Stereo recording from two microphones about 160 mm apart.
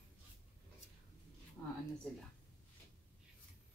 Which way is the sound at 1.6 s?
5° left (ahead or behind).